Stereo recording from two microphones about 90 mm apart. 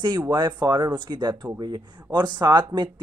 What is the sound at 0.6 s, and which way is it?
Speech, 55° right (ahead or behind).